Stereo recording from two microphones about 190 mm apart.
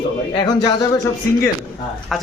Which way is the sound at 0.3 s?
20° left (ahead or behind).